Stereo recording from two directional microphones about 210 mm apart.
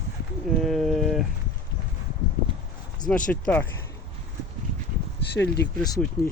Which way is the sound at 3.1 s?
5° left (ahead or behind).